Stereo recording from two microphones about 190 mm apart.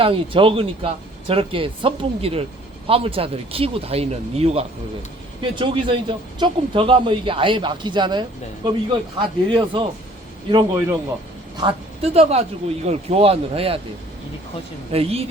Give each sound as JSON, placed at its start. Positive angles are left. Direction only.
{"t": 0.0, "sound": "speech", "side_deg": -30}
{"t": 11.5, "sound": "a man's voice", "side_deg": -30}
{"t": 14.9, "sound": "a man's voice", "side_deg": -30}